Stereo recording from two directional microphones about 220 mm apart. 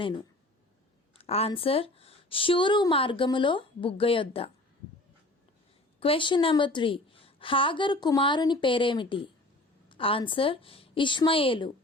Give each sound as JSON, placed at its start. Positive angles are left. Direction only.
{"t": 0.0, "sound": "a woman's voice", "side_deg": 20}
{"t": 6.0, "sound": "a woman's voice", "side_deg": 25}